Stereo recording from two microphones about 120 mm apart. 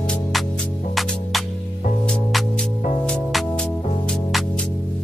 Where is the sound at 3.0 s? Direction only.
5° left (ahead or behind).